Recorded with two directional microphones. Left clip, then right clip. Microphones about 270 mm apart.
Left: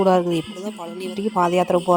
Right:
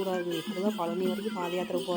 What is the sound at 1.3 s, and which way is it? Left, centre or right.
Speech, left.